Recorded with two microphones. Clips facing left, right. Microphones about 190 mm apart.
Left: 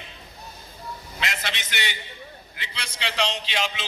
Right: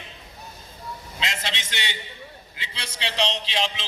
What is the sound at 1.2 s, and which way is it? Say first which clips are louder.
A man's voice: even; 25° right (ahead or behind).